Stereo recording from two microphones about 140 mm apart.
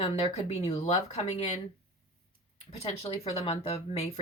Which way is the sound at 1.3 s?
55° left (ahead or behind).